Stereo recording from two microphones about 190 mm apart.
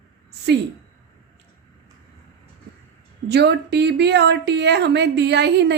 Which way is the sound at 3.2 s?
60° right (ahead or behind).